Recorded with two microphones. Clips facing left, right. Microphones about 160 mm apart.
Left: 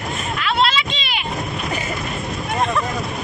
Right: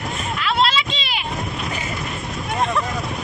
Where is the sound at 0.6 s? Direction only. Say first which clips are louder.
Even; 35° right (ahead or behind).